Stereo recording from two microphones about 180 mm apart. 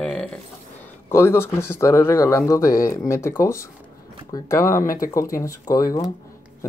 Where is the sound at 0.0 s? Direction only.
5° left (ahead or behind).